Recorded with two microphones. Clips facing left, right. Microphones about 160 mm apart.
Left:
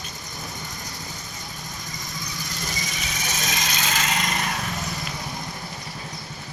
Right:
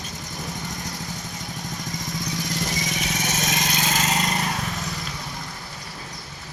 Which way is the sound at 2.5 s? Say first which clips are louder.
Right 3 dB; 80° right.